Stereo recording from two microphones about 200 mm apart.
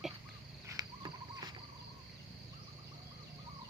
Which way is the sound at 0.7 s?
20° right (ahead or behind).